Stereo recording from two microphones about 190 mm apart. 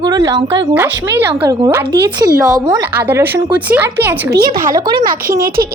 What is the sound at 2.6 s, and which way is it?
Speech, 15° right (ahead or behind).